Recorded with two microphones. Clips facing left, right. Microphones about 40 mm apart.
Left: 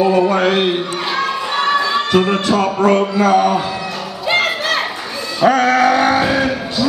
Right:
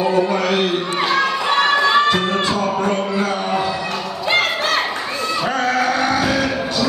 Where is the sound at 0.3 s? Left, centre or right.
Left.